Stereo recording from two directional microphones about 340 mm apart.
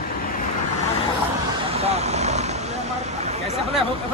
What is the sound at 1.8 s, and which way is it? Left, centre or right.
Vehicle, centre.